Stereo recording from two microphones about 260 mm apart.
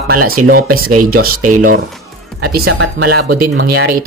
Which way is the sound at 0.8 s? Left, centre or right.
Right.